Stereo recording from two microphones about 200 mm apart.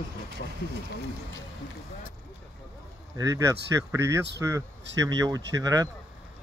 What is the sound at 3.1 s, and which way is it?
Speech, 15° right (ahead or behind).